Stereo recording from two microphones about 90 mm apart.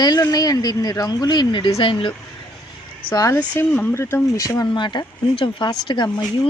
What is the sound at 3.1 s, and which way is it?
Speech, 40° left (ahead or behind).